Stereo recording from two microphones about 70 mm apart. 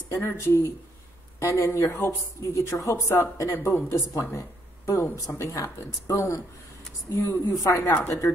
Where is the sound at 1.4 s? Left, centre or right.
Left.